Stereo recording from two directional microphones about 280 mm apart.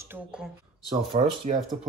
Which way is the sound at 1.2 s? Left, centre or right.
Right.